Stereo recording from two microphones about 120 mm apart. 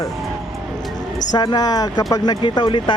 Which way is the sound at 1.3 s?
35° left (ahead or behind).